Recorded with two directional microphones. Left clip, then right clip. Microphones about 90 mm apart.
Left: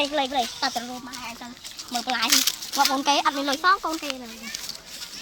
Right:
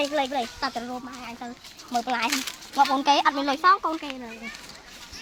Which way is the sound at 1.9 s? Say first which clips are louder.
Left 3 dB; 25° right (ahead or behind).